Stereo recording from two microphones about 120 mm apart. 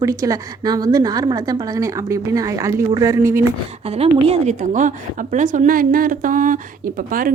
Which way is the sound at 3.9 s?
55° right (ahead or behind).